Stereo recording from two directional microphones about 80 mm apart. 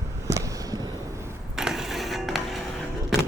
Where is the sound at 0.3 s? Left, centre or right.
Right.